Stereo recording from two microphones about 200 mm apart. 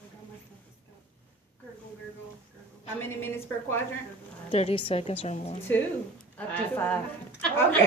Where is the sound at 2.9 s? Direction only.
10° left (ahead or behind).